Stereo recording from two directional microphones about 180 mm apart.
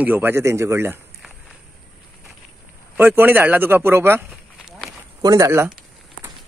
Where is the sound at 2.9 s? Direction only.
10° right (ahead or behind).